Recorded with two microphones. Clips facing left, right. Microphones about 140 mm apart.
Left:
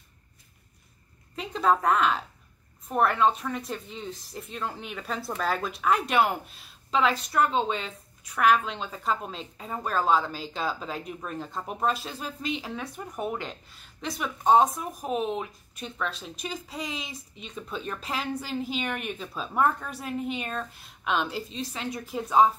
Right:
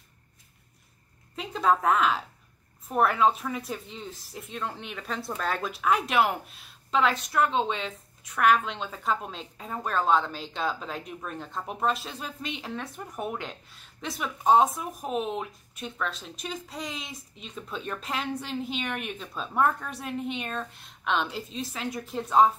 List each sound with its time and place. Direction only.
1.3 s speech: centre (ahead or behind)